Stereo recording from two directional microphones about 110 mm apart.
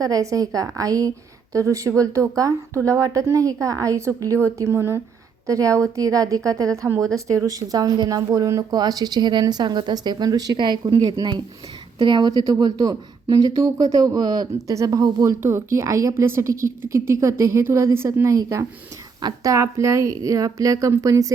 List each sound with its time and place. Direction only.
0.0 s speech: 30° right (ahead or behind)